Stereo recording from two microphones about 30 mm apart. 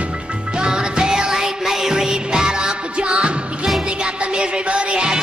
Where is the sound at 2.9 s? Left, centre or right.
Right.